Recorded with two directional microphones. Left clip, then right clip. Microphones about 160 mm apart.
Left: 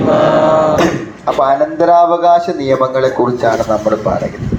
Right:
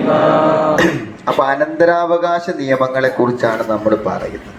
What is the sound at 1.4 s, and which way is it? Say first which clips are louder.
Speech: left 3 dB; 45° right (ahead or behind).